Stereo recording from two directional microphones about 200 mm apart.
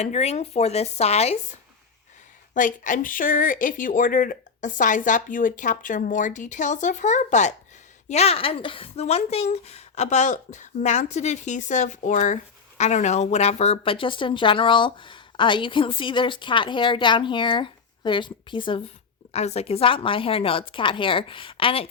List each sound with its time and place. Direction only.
0.0 s speech: 35° left (ahead or behind)
2.6 s speech: 40° left (ahead or behind)